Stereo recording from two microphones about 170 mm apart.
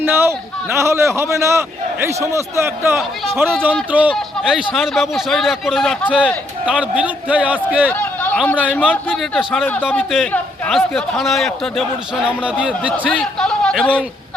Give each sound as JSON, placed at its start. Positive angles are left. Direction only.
{"t": 0.0, "sound": "a man's voice", "side_deg": -15}
{"t": 6.7, "sound": "a man's voice", "side_deg": -5}
{"t": 7.9, "sound": "a sound", "side_deg": 10}
{"t": 8.4, "sound": "a man's voice", "side_deg": 10}
{"t": 13.1, "sound": "speech", "side_deg": 5}